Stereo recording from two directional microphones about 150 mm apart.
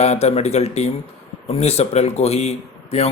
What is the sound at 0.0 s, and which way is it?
Speech, 45° left (ahead or behind).